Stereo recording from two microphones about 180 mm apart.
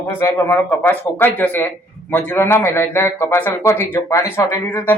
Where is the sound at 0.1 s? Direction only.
15° left (ahead or behind).